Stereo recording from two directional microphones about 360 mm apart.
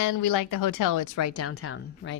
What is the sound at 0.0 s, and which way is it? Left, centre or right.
Speech, left.